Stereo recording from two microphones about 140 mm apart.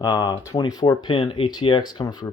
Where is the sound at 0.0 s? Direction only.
25° left (ahead or behind).